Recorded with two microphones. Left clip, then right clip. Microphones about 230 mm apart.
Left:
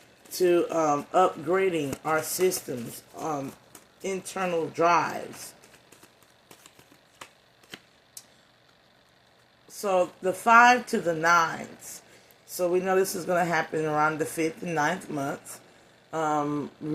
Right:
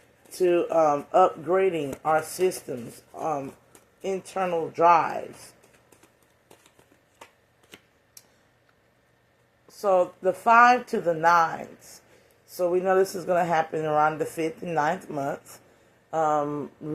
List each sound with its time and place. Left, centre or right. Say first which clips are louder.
0.3 s speech: right 1 dB; left
9.6 s speech: right 3 dB; left